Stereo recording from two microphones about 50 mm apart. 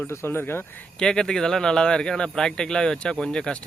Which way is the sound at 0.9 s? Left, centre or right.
Centre.